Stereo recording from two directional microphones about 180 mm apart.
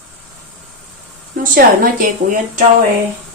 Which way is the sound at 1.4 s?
50° right (ahead or behind).